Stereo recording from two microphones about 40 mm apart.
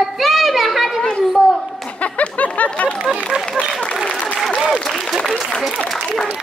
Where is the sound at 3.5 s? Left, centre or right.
Left.